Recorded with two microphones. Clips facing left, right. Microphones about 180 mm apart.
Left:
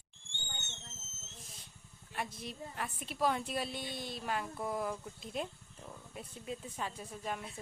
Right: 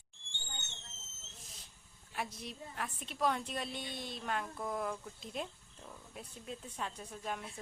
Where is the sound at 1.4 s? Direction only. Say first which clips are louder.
Left 1 dB; centre (ahead or behind).